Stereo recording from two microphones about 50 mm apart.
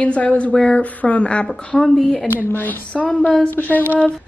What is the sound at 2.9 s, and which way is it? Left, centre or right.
Speech, left.